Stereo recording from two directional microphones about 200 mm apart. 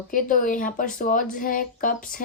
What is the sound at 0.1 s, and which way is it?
A woman's voice, 40° left (ahead or behind).